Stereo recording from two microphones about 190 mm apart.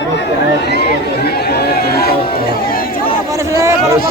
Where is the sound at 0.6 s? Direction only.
60° left (ahead or behind).